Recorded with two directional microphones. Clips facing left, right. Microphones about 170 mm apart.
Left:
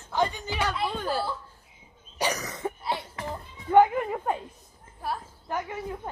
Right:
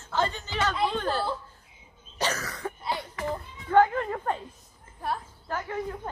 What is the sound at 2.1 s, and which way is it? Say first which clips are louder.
Cough: left 1 dB; 15° left (ahead or behind).